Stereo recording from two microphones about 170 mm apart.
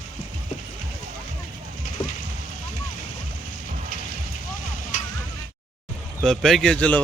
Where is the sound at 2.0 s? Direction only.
30° left (ahead or behind).